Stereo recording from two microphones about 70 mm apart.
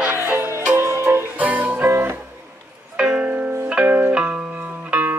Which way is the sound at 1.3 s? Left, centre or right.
Right.